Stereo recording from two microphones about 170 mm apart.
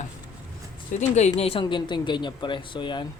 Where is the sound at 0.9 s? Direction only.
40° left (ahead or behind).